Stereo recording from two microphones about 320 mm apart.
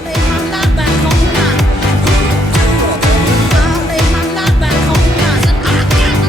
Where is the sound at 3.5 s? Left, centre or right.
Centre.